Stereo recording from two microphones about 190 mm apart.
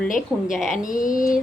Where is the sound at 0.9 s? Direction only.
45° left (ahead or behind).